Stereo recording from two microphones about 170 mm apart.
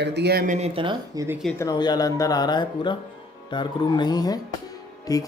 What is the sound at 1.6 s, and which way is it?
Speech, 25° left (ahead or behind).